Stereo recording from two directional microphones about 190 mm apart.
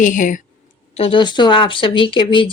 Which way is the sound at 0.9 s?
30° left (ahead or behind).